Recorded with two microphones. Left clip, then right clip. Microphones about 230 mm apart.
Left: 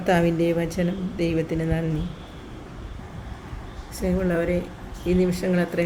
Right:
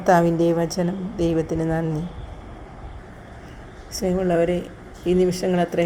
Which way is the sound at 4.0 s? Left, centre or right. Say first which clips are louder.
Right 4 dB; centre.